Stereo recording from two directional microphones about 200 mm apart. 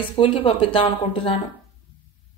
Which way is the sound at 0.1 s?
25° left (ahead or behind).